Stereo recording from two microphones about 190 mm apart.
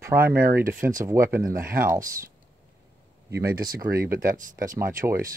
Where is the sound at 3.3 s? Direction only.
15° right (ahead or behind).